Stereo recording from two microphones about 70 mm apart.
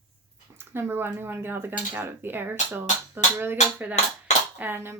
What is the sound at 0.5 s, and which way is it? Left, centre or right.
Speech, right.